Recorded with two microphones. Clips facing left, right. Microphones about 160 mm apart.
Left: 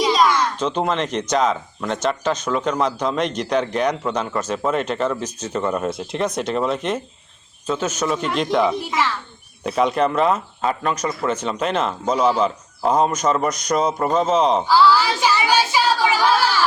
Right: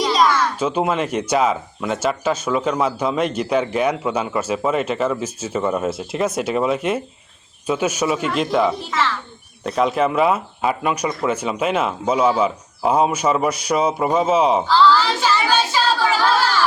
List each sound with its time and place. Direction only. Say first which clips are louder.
0.0 s a sound: even; centre (ahead or behind)
0.5 s speech: right 1 dB; 5° right (ahead or behind)
8.8 s speech: even; 15° left (ahead or behind)
9.6 s speech: even; centre (ahead or behind)
14.7 s child singing: even; 10° left (ahead or behind)